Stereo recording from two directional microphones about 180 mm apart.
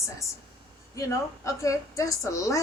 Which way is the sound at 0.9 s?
15° left (ahead or behind).